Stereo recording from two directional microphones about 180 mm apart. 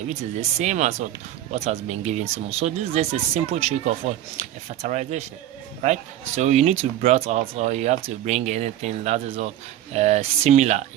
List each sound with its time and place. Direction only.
0.1 s speech: 40° right (ahead or behind)